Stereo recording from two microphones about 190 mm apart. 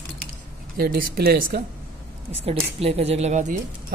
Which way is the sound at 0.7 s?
55° right (ahead or behind).